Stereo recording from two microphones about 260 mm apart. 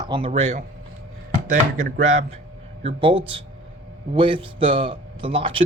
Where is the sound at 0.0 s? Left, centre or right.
Centre.